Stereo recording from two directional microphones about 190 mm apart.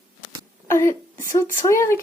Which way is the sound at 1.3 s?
15° left (ahead or behind).